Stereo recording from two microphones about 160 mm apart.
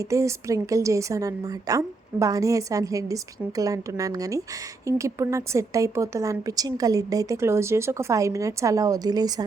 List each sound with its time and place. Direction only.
0.0 s a woman's voice: 20° right (ahead or behind)